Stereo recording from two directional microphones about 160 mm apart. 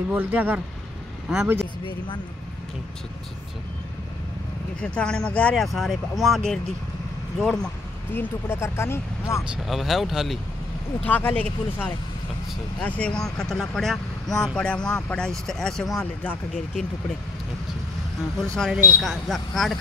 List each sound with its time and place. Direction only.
0.1 s speech: 10° right (ahead or behind)
4.7 s speech: 5° left (ahead or behind)
9.4 s speech: 5° right (ahead or behind)
11.1 s speech: 10° left (ahead or behind)
18.6 s speech: 5° right (ahead or behind)